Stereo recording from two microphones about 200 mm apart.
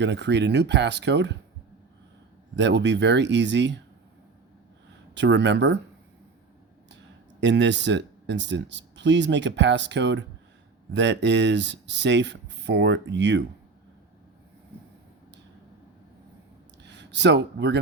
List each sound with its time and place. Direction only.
0.0 s speech: 60° right (ahead or behind)
2.6 s speech: 60° right (ahead or behind)
5.1 s speech: 60° right (ahead or behind)
7.4 s speech: 60° right (ahead or behind)
16.8 s speech: 60° right (ahead or behind)